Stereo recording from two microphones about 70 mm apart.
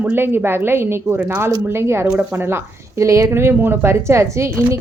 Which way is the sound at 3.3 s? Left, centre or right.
Right.